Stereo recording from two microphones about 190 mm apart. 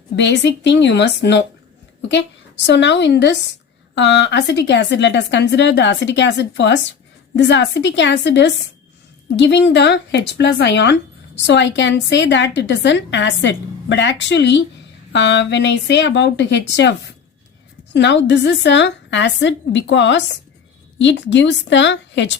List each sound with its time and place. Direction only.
0.2 s a woman's voice: 70° left (ahead or behind)
17.9 s a woman's voice: 70° left (ahead or behind)